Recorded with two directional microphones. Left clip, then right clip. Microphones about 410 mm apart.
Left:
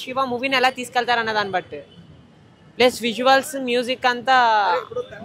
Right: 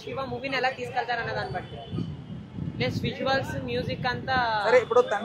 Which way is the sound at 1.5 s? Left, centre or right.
Left.